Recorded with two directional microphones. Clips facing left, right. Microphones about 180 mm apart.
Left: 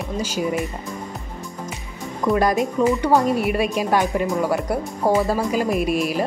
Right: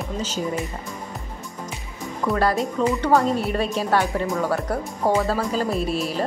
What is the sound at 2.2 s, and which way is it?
Speech, 15° left (ahead or behind).